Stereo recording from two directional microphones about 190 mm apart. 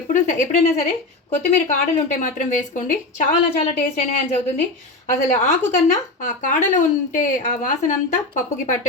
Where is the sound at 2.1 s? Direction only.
40° left (ahead or behind).